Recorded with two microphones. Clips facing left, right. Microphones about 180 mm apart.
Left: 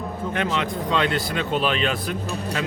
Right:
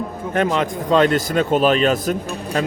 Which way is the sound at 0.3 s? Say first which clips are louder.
Right 7 dB; 45° right (ahead or behind).